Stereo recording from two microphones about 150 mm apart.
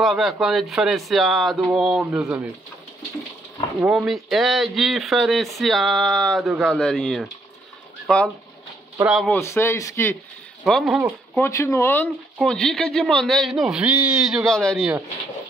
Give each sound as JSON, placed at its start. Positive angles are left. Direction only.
{"t": 0.0, "sound": "speech", "side_deg": 0}
{"t": 3.8, "sound": "speech", "side_deg": -5}
{"t": 9.3, "sound": "speech", "side_deg": 15}
{"t": 10.6, "sound": "speech", "side_deg": 0}
{"t": 11.3, "sound": "speech", "side_deg": 15}
{"t": 12.4, "sound": "speech", "side_deg": 5}